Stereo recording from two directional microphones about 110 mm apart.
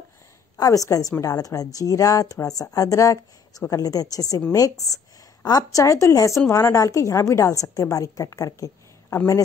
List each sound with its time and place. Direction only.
0.6 s a woman's voice: 30° left (ahead or behind)